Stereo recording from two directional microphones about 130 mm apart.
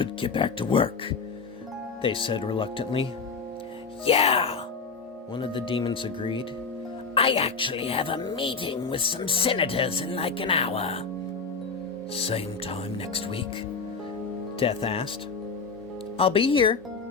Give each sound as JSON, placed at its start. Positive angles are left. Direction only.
{"t": 0.0, "sound": "speech", "side_deg": 40}
{"t": 12.1, "sound": "speech", "side_deg": 50}
{"t": 14.6, "sound": "speech", "side_deg": 45}
{"t": 16.1, "sound": "speech", "side_deg": 45}